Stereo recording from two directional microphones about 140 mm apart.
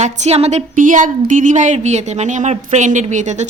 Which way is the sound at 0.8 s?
70° right (ahead or behind).